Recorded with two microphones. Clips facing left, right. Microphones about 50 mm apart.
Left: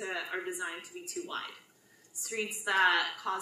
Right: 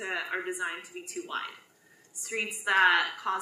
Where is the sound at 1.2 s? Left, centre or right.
Centre.